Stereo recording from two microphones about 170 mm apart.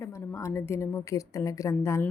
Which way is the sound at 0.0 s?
15° left (ahead or behind).